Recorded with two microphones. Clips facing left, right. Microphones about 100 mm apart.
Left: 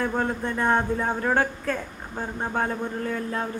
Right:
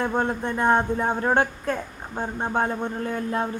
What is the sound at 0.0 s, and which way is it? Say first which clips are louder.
Speech: right 1 dB; 25° right (ahead or behind).